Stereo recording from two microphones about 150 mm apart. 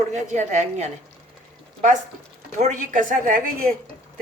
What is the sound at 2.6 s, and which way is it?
A woman's voice, 60° right (ahead or behind).